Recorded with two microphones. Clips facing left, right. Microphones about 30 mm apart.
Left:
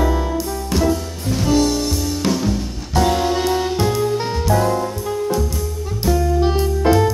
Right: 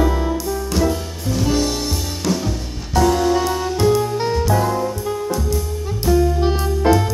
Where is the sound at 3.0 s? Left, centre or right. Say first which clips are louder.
Right 1 dB; left.